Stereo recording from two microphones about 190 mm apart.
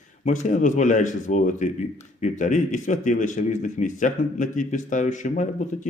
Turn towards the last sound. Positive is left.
turn(degrees=40)  # may be behind; listen again after turning